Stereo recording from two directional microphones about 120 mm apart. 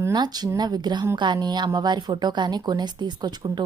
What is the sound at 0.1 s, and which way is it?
A woman's voice, 35° right (ahead or behind).